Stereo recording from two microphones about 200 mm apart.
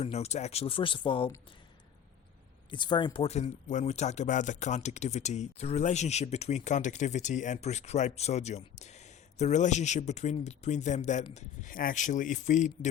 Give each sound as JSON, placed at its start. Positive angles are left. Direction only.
{"t": 0.0, "sound": "speech", "side_deg": 30}
{"t": 2.6, "sound": "speech", "side_deg": 25}